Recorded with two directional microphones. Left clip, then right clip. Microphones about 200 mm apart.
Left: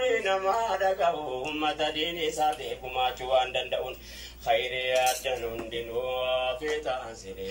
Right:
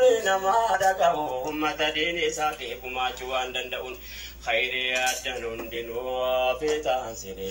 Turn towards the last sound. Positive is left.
turn(degrees=-5)  # may be behind; listen again after turning